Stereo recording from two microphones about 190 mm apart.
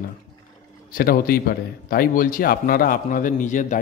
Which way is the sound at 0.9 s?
50° left (ahead or behind).